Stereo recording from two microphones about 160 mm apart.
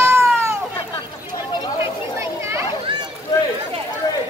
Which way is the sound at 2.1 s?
15° right (ahead or behind).